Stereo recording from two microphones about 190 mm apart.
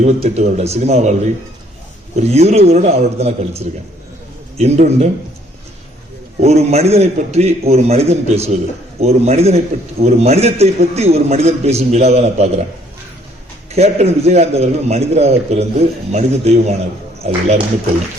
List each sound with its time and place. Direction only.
0.0 s a man's voice: 35° right (ahead or behind)
6.4 s a man's voice: 35° right (ahead or behind)
13.7 s a man's voice: 35° right (ahead or behind)